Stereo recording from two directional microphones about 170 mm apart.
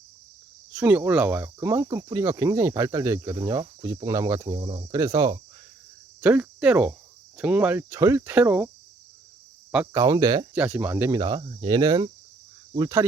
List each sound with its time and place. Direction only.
0.7 s speech: 10° right (ahead or behind)
6.1 s cricket: 10° right (ahead or behind)
7.3 s speech: 5° right (ahead or behind)
9.8 s speech: 20° right (ahead or behind)
10.5 s speech: 10° right (ahead or behind)